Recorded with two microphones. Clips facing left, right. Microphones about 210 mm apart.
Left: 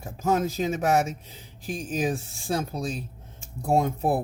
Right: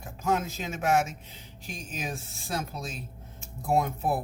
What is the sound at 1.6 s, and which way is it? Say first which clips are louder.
Speech: left 10 dB; 35° left (ahead or behind).